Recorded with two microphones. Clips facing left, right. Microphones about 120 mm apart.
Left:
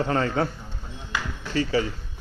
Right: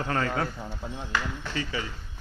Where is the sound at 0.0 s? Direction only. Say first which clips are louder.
Left 5 dB; 25° left (ahead or behind).